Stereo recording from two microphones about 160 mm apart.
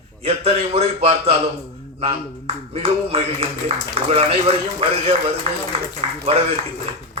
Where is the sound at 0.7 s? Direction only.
35° right (ahead or behind).